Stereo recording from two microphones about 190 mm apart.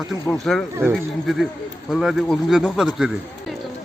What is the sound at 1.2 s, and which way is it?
Speech, centre (ahead or behind).